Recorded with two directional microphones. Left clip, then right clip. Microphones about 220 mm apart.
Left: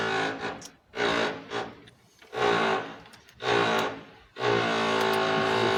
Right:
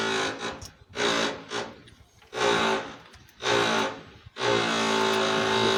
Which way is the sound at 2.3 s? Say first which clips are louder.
Right 1 dB; 55° right (ahead or behind).